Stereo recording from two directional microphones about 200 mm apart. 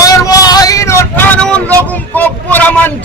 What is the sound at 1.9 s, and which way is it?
Speech, 10° left (ahead or behind).